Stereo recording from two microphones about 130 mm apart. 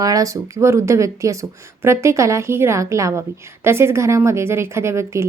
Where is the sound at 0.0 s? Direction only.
25° right (ahead or behind).